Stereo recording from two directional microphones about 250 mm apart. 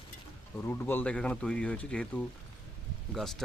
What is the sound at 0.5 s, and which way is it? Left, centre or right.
Speech, centre.